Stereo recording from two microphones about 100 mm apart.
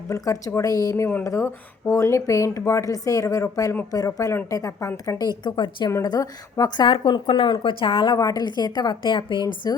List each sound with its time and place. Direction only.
0.1 s a woman's voice: 35° left (ahead or behind); by 5.9 s 50° left (ahead or behind)
5.9 s a woman's voice: 35° left (ahead or behind)
6.8 s speech: 60° left (ahead or behind)
8.1 s a woman's voice: 40° left (ahead or behind)